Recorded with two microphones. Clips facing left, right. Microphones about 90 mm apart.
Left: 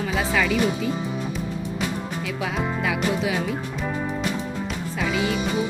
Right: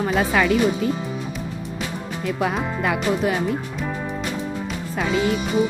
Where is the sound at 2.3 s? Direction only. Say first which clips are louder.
Right 2 dB; 55° right (ahead or behind).